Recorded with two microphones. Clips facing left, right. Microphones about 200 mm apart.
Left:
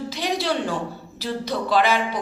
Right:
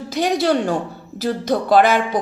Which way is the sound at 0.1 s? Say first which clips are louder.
Right 9 dB; 50° right (ahead or behind).